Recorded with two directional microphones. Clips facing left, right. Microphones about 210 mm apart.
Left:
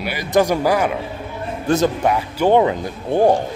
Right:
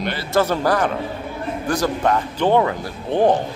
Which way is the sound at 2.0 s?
10° left (ahead or behind).